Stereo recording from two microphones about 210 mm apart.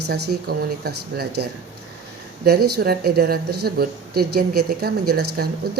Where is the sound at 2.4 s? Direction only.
50° right (ahead or behind).